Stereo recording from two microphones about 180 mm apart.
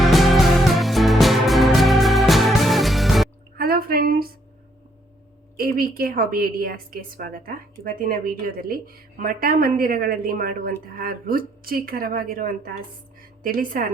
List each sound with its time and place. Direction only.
0.0 s music: centre (ahead or behind)
3.6 s a sound: 55° right (ahead or behind)
5.5 s a woman's voice: 55° right (ahead or behind)
13.1 s music: 50° right (ahead or behind)